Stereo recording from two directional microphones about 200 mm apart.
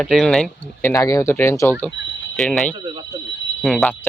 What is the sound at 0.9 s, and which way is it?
Speech, 15° left (ahead or behind).